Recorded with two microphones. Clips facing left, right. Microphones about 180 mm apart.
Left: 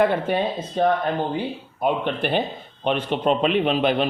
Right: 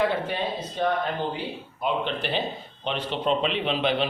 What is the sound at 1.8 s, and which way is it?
Speech, 50° left (ahead or behind).